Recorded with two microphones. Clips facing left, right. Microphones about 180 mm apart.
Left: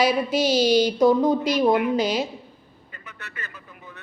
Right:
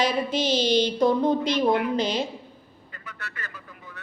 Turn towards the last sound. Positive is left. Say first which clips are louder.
# even
turn(degrees=20)  # may be behind; listen again after turning